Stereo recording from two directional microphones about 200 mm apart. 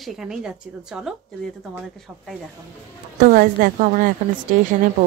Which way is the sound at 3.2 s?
45° right (ahead or behind).